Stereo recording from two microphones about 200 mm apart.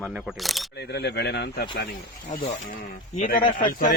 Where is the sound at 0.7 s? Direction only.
60° left (ahead or behind).